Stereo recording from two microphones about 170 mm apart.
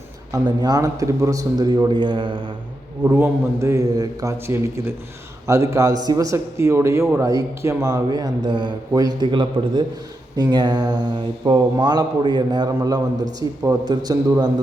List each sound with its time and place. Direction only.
0.3 s speech: 20° right (ahead or behind)
3.0 s a man's voice: 15° right (ahead or behind)